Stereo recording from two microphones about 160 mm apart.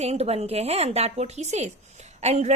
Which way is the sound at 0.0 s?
40° right (ahead or behind).